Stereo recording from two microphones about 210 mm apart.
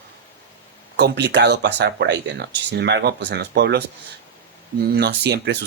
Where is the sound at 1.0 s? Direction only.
55° right (ahead or behind).